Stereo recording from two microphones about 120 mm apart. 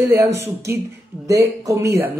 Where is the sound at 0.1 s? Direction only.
25° right (ahead or behind).